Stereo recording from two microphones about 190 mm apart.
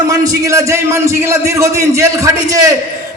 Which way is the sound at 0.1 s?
15° right (ahead or behind).